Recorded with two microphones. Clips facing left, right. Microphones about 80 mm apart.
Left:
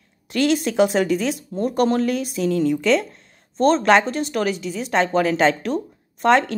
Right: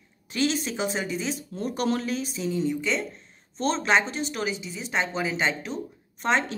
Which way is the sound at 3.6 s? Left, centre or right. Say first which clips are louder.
Left 8 dB; left.